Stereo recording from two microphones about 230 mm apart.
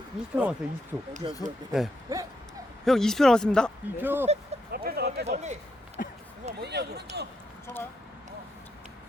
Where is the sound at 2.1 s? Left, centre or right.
Centre.